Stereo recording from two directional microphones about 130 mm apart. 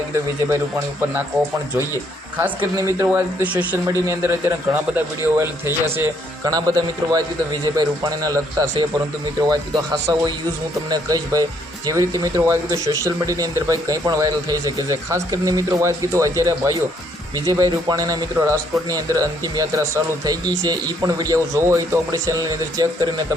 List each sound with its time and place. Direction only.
3.1 s speech: 10° right (ahead or behind); by 23.2 s 30° right (ahead or behind)